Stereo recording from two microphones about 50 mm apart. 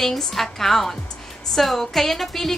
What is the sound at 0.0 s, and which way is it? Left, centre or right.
A woman's voice, centre.